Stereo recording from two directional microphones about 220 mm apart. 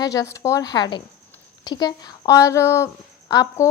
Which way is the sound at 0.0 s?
15° left (ahead or behind).